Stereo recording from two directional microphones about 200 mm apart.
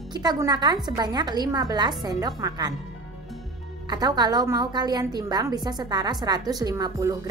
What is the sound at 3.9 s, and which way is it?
A woman's voice, 20° right (ahead or behind).